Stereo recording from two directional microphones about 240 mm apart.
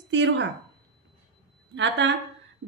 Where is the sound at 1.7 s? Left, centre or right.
Right.